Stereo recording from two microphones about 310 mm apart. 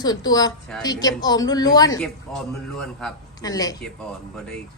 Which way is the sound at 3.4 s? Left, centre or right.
Centre.